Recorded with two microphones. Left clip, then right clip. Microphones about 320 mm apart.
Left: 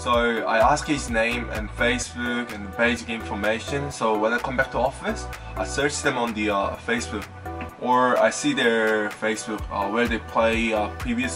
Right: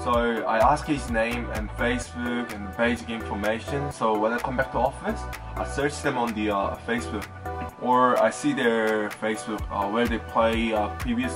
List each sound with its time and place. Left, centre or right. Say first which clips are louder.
0.1 s speech: left 3 dB; centre